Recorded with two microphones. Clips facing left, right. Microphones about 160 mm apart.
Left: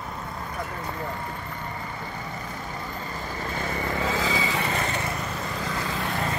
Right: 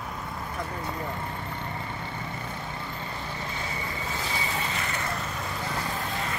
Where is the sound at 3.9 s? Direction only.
90° left.